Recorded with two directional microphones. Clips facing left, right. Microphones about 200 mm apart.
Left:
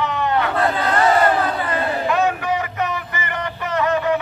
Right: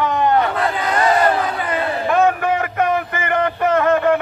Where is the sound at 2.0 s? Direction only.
55° right (ahead or behind).